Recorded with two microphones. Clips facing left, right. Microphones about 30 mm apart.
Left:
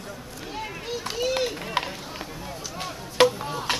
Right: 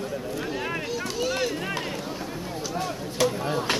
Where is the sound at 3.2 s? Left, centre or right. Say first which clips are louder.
Left 5 dB; left.